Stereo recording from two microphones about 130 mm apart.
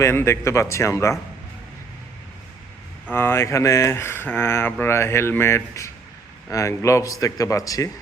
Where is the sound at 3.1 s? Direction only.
20° left (ahead or behind).